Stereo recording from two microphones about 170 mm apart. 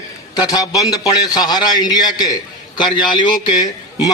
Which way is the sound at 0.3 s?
20° left (ahead or behind).